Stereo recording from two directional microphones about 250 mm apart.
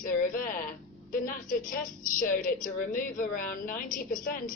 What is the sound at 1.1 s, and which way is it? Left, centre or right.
A woman's voice, left.